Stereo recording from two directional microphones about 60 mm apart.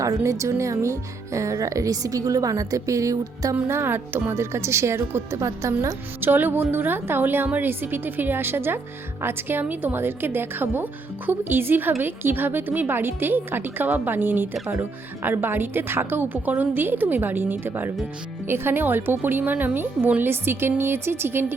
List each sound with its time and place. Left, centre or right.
0.3 s speech: right
3.5 s a woman's voice: right
6.1 s a woman's voice: right
20.2 s a woman's voice: right